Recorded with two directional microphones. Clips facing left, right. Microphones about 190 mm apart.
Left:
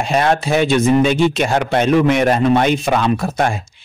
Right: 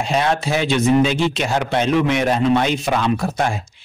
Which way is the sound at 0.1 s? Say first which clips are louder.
Left 4 dB; 55° left (ahead or behind).